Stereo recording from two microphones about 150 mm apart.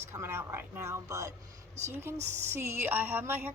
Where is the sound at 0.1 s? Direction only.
15° right (ahead or behind).